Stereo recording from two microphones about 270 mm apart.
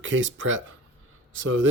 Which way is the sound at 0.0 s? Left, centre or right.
Right.